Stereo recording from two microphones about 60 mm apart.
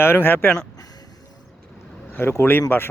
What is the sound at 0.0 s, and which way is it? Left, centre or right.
Speech, left.